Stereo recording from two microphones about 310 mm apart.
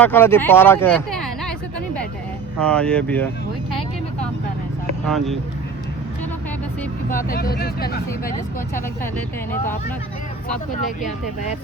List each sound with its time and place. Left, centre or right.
0.0 s speech: centre
2.6 s speech: centre
5.0 s speech: centre
7.1 s speech: left